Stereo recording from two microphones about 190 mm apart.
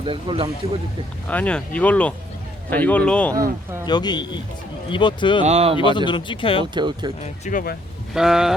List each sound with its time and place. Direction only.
0.0 s speech: 25° right (ahead or behind)
1.3 s speech: 5° left (ahead or behind)
3.8 s speech: 20° left (ahead or behind)
5.5 s speech: 35° right (ahead or behind)
5.7 s speech: 25° left (ahead or behind)
6.7 s speech: 25° right (ahead or behind)
7.4 s speech: 50° left (ahead or behind)
8.1 s speech: centre (ahead or behind)